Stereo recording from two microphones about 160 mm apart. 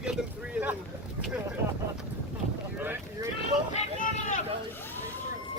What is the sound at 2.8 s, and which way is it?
Boat, 10° right (ahead or behind).